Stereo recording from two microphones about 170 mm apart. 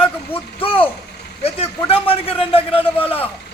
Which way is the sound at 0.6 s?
30° left (ahead or behind).